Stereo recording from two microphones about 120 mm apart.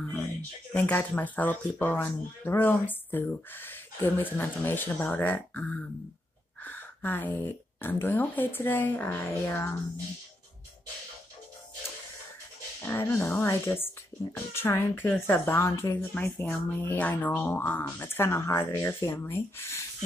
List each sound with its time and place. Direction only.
0.7 s speech: 15° left (ahead or behind)
12.8 s speech: 15° left (ahead or behind)